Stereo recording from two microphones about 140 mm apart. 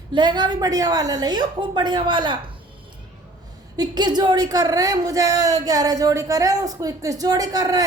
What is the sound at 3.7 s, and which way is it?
A woman's voice, 30° right (ahead or behind).